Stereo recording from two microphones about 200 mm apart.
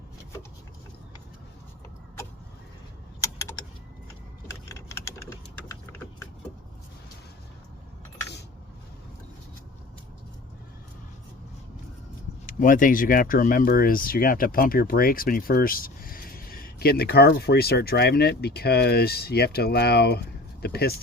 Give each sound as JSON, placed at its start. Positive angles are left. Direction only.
{"t": 3.2, "sound": "vehicle", "side_deg": 15}
{"t": 4.7, "sound": "typing", "side_deg": 15}
{"t": 12.5, "sound": "speech", "side_deg": 45}